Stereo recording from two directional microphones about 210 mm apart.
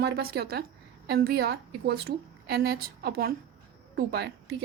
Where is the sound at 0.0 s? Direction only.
50° right (ahead or behind).